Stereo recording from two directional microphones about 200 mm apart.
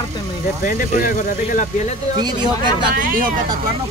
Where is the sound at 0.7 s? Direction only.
45° left (ahead or behind).